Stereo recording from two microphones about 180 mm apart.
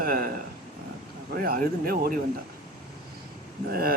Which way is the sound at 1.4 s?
55° right (ahead or behind).